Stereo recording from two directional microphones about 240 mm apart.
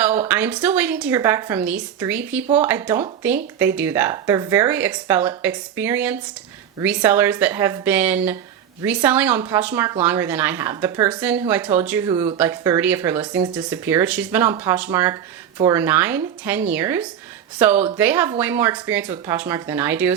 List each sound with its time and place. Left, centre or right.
0.0 s a woman's voice: centre